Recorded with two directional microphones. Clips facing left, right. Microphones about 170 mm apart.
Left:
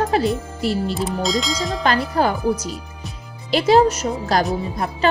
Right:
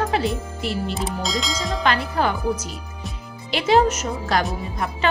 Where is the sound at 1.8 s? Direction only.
40° left (ahead or behind).